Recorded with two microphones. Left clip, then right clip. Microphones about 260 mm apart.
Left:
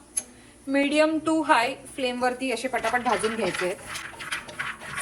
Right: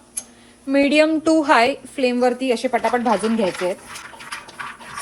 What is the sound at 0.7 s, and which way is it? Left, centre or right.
A woman's voice, right.